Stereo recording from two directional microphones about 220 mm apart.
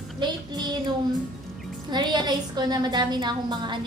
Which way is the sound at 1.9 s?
20° right (ahead or behind).